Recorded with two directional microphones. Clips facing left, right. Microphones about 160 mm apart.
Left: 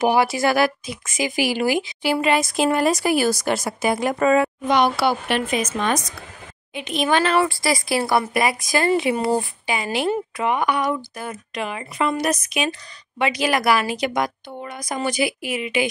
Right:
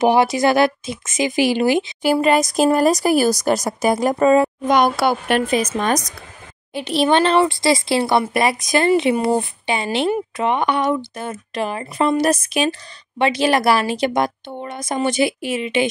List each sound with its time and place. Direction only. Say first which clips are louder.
0.0 s speech: right 3 dB; 20° right (ahead or behind)
2.2 s a woman's voice: right 3 dB; 40° right (ahead or behind)
4.7 s a woman's voice: right 2 dB; 45° right (ahead or behind); by 15.9 s 25° right (ahead or behind)